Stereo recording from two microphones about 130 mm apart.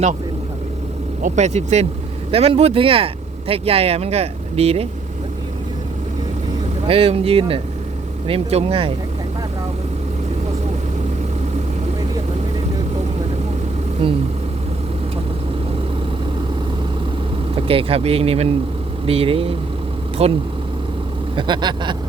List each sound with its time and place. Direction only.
1.2 s speech: 60° right (ahead or behind)
6.8 s speech: 50° right (ahead or behind)
14.0 s speech: 45° right (ahead or behind)
17.5 s speech: 45° right (ahead or behind)
21.3 s speech: 35° right (ahead or behind)